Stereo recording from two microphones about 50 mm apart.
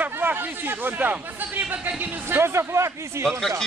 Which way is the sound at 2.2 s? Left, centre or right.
Right.